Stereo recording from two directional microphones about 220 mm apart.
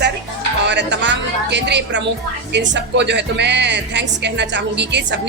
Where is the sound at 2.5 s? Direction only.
50° right (ahead or behind).